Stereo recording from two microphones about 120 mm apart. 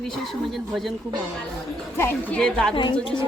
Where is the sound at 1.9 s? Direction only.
20° left (ahead or behind).